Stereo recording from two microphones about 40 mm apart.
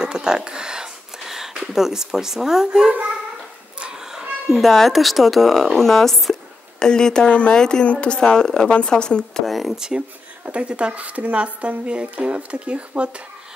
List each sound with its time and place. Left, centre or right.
0.0 s a sound: centre
1.2 s a sound: centre
1.6 s speech: centre
3.8 s a sound: centre
4.7 s speech: centre
6.8 s a woman's voice: centre
7.2 s speech: left
7.5 s speech: centre
7.8 s a woman's voice: left
9.5 s speech: centre
9.8 s speech: centre
10.5 s speech: right